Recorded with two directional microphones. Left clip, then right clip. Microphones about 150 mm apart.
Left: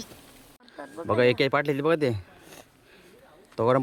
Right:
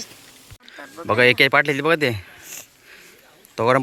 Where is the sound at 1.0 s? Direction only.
5° right (ahead or behind).